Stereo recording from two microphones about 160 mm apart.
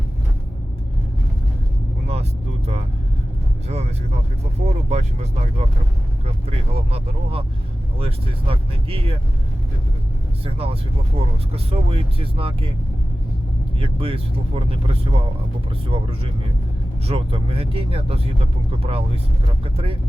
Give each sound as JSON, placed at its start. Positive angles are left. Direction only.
{"t": 3.7, "sound": "vehicle", "side_deg": -40}
{"t": 4.6, "sound": "speech", "side_deg": -45}
{"t": 6.7, "sound": "speech", "side_deg": -35}
{"t": 10.4, "sound": "speech", "side_deg": -35}
{"t": 13.7, "sound": "speech", "side_deg": -35}